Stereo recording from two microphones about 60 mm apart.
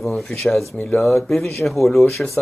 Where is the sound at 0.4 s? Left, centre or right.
Centre.